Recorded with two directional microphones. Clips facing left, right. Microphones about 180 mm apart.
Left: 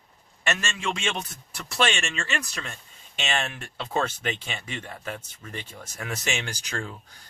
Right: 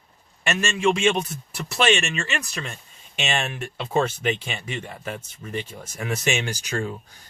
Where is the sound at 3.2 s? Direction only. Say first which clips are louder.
Right 3 dB; 15° right (ahead or behind).